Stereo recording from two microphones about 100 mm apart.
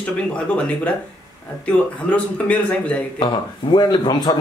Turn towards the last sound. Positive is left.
turn(degrees=45)  # may be behind; listen again after turning